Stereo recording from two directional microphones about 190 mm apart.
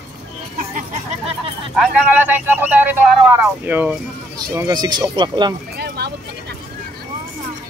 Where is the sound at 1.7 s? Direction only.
5° right (ahead or behind).